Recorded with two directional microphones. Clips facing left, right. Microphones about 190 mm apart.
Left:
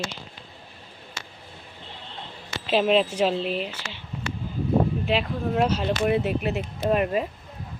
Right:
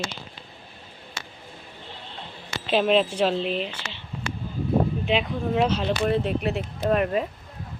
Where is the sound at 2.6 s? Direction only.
Centre (ahead or behind).